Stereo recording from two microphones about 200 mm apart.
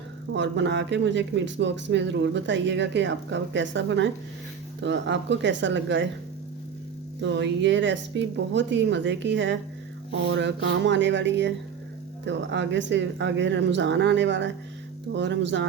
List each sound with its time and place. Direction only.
0.3 s speech: 60° right (ahead or behind)
7.2 s speech: 65° right (ahead or behind)